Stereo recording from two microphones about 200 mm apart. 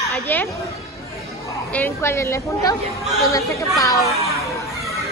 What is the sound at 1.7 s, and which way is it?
A woman's voice, 10° left (ahead or behind).